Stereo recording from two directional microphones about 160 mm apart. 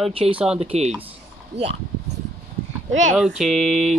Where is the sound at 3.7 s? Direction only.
45° right (ahead or behind).